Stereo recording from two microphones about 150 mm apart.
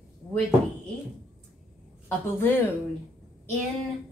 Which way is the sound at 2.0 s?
15° left (ahead or behind).